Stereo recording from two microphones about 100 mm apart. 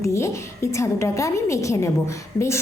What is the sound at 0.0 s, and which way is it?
A woman's voice, 30° left (ahead or behind).